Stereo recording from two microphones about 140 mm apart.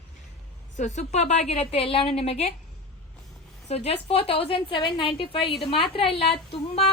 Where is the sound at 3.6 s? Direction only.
45° left (ahead or behind).